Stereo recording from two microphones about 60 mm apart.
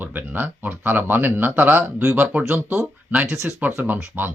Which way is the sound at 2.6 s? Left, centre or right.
Right.